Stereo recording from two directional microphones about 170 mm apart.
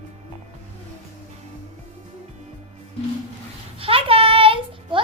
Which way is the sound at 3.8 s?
35° right (ahead or behind).